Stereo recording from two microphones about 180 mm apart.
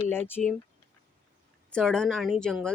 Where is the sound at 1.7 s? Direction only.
5° left (ahead or behind).